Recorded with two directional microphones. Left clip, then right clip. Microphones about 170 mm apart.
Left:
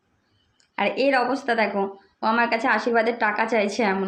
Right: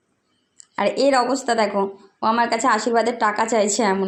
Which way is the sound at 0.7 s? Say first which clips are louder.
Right 3 dB; 15° right (ahead or behind).